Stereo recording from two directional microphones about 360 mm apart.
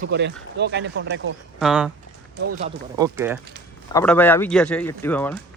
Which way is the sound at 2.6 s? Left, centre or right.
Centre.